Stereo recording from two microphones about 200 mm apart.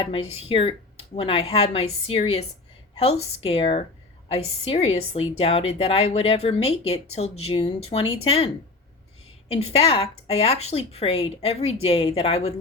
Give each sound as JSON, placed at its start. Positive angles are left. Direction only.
{"t": 0.0, "sound": "speech", "side_deg": 25}
{"t": 9.5, "sound": "speech", "side_deg": 30}